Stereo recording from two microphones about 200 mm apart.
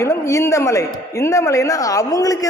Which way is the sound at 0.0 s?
15° left (ahead or behind).